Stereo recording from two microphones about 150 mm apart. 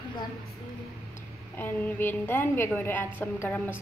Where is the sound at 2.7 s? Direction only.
10° left (ahead or behind).